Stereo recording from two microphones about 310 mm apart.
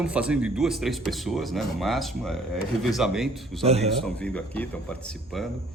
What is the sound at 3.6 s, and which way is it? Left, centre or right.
Speech, centre.